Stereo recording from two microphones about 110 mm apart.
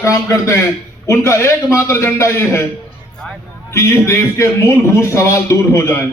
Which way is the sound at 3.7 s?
25° left (ahead or behind).